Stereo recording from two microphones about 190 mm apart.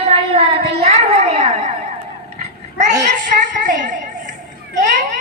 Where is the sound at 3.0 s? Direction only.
40° right (ahead or behind).